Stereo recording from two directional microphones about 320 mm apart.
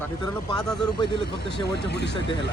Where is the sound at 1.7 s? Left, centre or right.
Left.